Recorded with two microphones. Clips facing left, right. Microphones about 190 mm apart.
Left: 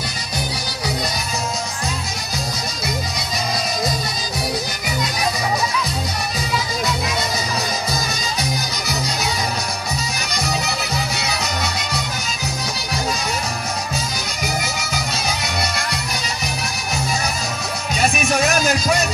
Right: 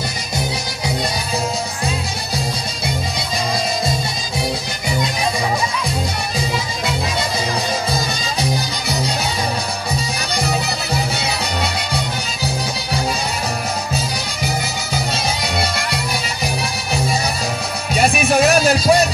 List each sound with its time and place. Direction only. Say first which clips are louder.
7.9 s music: right 3 dB; 30° right (ahead or behind)
11.1 s music: right 2 dB; 30° right (ahead or behind)
18.0 s music: right 4 dB; 35° right (ahead or behind)